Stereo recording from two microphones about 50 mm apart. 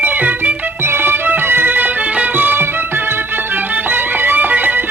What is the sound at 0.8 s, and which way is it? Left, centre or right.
Music, right.